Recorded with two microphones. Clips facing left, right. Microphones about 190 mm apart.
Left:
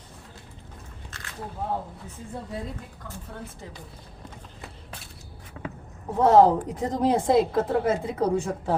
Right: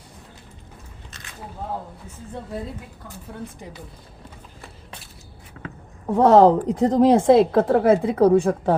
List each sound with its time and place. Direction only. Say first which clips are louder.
1.1 s biting: left 1 dB; 20° right (ahead or behind)
6.1 s a woman's voice: right 4 dB; 75° right (ahead or behind)